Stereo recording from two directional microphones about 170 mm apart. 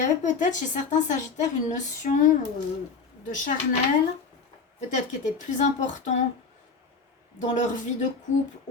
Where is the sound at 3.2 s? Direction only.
50° left (ahead or behind).